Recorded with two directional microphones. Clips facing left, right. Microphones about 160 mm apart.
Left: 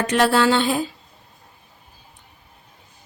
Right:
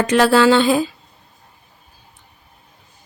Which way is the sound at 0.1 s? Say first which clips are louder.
Right 4 dB; 90° right.